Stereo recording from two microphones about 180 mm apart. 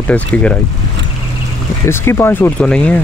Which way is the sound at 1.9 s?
15° left (ahead or behind).